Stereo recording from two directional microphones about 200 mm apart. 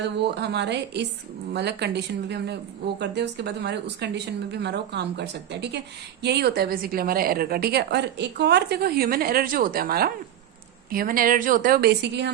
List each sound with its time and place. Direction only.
0.0 s a woman's voice: 55° right (ahead or behind)